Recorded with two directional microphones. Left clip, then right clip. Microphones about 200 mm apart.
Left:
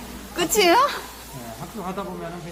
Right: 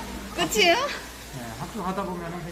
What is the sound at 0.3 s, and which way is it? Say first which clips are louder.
Speech: left 4 dB; 35° left (ahead or behind).